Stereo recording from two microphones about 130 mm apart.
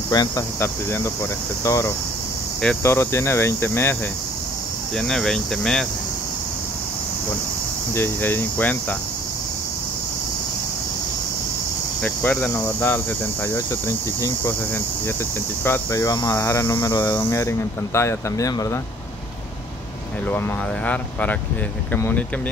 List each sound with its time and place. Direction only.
0.1 s cricket: 30° left (ahead or behind)
0.6 s speech: 20° left (ahead or behind)
4.9 s cricket: 5° left (ahead or behind)
7.9 s speech: 15° left (ahead or behind)
12.0 s speech: 10° left (ahead or behind)
15.6 s speech: 20° left (ahead or behind)
20.2 s speech: 10° left (ahead or behind)